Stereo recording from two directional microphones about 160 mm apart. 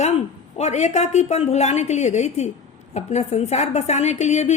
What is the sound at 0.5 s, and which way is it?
A woman's voice, 45° left (ahead or behind).